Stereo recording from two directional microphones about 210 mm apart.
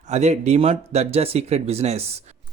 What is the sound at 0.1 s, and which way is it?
A man's voice, 30° right (ahead or behind).